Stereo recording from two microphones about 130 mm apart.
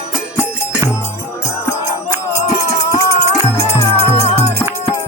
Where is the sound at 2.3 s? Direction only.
25° left (ahead or behind).